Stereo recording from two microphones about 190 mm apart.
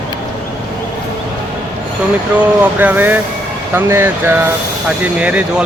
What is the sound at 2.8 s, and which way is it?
Speech, 10° right (ahead or behind).